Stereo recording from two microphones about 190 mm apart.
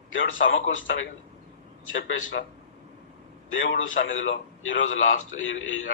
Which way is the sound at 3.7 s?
90° left.